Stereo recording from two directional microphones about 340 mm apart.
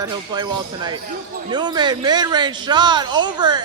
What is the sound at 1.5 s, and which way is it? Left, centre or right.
A man's voice, centre.